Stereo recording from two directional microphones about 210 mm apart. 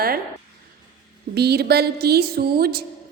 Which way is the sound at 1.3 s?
50° right (ahead or behind).